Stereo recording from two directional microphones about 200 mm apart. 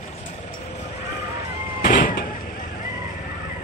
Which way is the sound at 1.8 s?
45° left (ahead or behind).